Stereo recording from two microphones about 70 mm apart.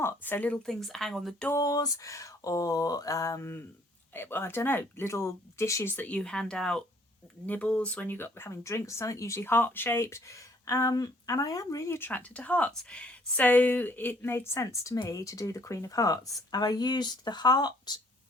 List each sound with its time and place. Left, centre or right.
0.2 s speech: left
0.5 s speech: centre
1.5 s a woman's voice: left
6.0 s speech: centre
7.4 s speech: left
11.9 s a woman's voice: left